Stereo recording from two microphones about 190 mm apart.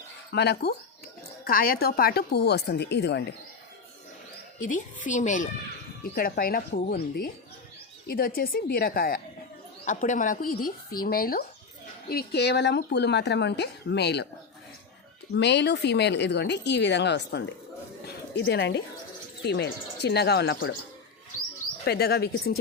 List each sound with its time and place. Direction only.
0.3 s speech: 60° left (ahead or behind)
4.6 s speech: 45° left (ahead or behind); by 14.3 s 60° left (ahead or behind)
15.4 s speech: 65° left (ahead or behind)
18.0 s a sound: 60° left (ahead or behind)
19.5 s speech: 60° left (ahead or behind)
21.8 s speech: 55° left (ahead or behind)